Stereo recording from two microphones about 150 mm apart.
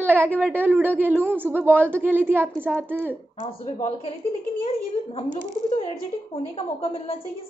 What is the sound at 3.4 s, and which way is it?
Speech, 50° left (ahead or behind).